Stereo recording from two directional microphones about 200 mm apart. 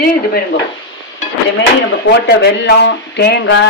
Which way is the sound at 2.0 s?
60° left (ahead or behind).